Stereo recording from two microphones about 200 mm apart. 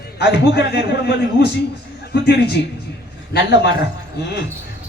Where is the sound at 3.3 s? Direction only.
55° left (ahead or behind).